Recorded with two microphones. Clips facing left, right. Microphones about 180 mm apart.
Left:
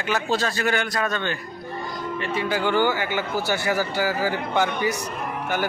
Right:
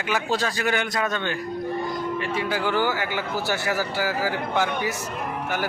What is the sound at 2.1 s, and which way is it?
Speech, 5° right (ahead or behind).